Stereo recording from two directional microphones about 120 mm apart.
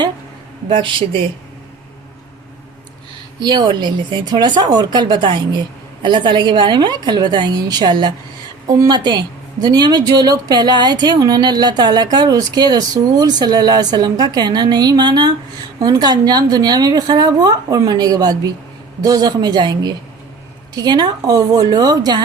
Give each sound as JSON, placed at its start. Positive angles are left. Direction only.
{"t": 0.7, "sound": "speech", "side_deg": -45}
{"t": 3.4, "sound": "a woman's voice", "side_deg": -40}